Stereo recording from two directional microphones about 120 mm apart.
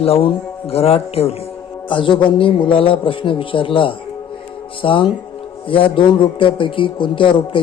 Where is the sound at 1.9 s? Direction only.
45° left (ahead or behind).